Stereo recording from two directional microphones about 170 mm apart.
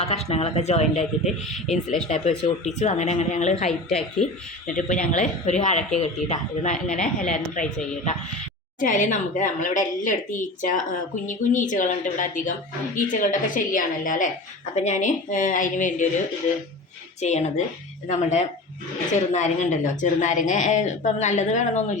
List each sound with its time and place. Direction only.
0.0 s speech: 35° left (ahead or behind)
1.2 s speech: centre (ahead or behind)
2.0 s a woman's voice: 45° left (ahead or behind)
8.8 s a woman's voice: 50° left (ahead or behind)
17.2 s a woman's voice: 40° left (ahead or behind)